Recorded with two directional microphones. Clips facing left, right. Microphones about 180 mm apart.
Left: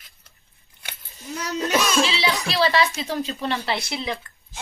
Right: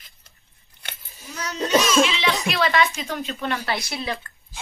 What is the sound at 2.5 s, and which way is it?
A woman's voice, 35° left (ahead or behind).